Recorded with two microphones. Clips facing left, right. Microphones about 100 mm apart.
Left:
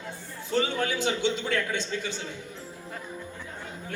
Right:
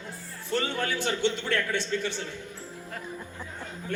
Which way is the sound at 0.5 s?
15° left (ahead or behind).